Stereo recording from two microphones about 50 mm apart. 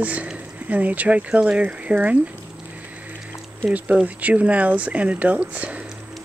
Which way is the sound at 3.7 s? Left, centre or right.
Right.